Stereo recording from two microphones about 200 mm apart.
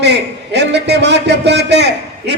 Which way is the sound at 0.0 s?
60° right (ahead or behind).